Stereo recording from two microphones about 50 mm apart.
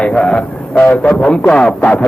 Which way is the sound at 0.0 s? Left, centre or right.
Left.